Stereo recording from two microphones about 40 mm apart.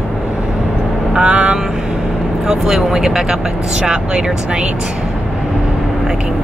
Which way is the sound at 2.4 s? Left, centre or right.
Centre.